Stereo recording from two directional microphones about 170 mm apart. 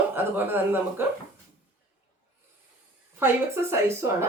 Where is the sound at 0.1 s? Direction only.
10° right (ahead or behind).